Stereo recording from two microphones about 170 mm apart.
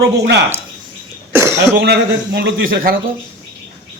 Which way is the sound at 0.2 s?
85° right.